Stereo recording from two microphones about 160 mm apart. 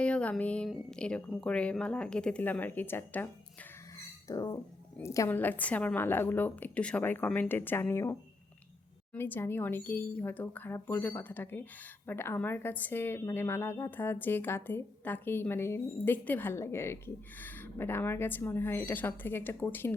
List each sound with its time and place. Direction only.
0.0 s speech: 10° left (ahead or behind)
4.3 s dog: 20° left (ahead or behind)
4.9 s speech: 20° left (ahead or behind)
9.1 s speech: 15° left (ahead or behind)